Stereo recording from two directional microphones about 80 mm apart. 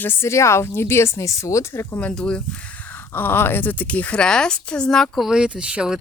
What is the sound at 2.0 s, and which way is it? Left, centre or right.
Speech, centre.